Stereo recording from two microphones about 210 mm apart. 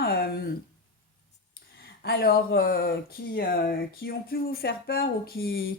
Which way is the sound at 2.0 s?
50° left (ahead or behind).